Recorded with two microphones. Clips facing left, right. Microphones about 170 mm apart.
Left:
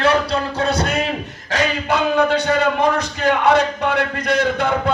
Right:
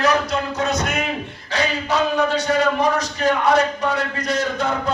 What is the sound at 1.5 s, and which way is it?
A man's voice, 60° left (ahead or behind).